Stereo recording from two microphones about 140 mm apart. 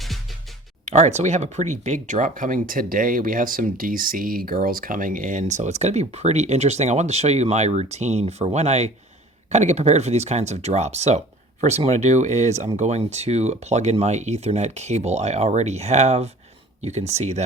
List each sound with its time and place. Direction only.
0.0 s music: centre (ahead or behind)
0.9 s speech: 55° right (ahead or behind)